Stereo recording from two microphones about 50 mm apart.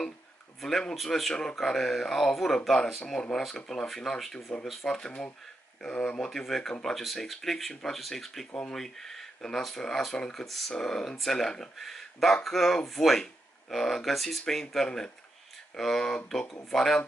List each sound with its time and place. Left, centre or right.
0.6 s speech: centre
4.8 s speech: centre